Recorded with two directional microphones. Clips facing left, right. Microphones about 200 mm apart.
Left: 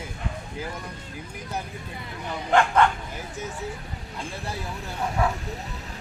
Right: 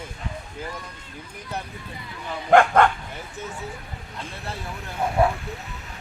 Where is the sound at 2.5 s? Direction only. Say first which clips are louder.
Right 4 dB; 50° right (ahead or behind).